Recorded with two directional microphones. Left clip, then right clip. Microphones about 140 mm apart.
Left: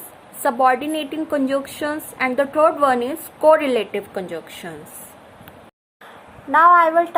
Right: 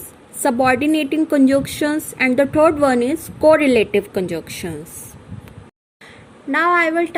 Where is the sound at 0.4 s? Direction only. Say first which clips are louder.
Right 1 dB; 50° right (ahead or behind).